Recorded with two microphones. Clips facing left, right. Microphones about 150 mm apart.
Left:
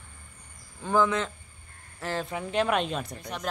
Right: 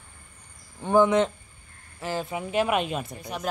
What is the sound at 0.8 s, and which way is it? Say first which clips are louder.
Speech: right 5 dB; 25° right (ahead or behind).